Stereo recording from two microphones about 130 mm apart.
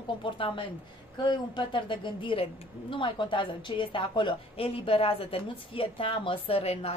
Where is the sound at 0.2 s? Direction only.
40° left (ahead or behind).